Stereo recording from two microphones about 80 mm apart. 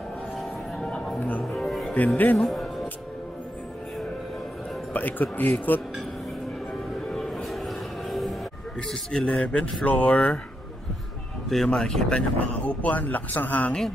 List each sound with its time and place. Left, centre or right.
0.4 s music: centre
4.9 s speech: left
7.0 s a sound: centre
8.8 s speech: centre
11.4 s speech: centre; by 13.7 s left